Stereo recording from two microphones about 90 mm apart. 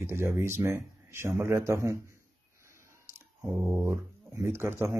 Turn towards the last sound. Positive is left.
turn(degrees=-25)  # may be behind; listen again after turning